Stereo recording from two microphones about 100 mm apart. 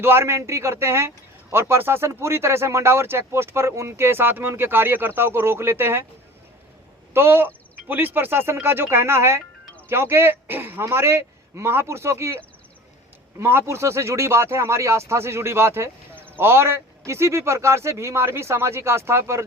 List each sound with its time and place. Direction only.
0.0 s speech: 25° right (ahead or behind)
7.1 s speech: 25° right (ahead or behind)
13.4 s speech: 25° right (ahead or behind)